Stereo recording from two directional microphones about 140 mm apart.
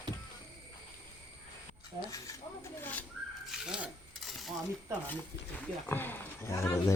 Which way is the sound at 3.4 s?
5° right (ahead or behind).